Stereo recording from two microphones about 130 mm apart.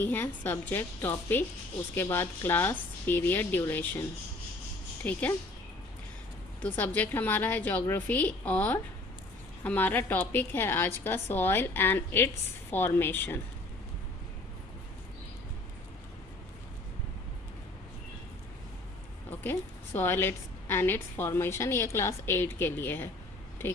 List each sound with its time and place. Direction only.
0.0 s a woman's voice: 15° left (ahead or behind)
5.0 s a woman's voice: 10° left (ahead or behind)
6.6 s a woman's voice: 15° left (ahead or behind)
19.4 s a woman's voice: 15° left (ahead or behind)